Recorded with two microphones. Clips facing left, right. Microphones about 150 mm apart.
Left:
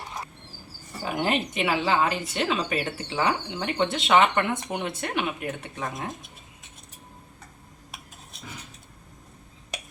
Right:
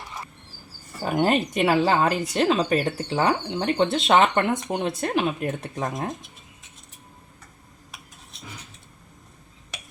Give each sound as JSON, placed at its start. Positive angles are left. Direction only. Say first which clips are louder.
{"t": 1.0, "sound": "speech", "louder": "right 5 dB", "side_deg": -40}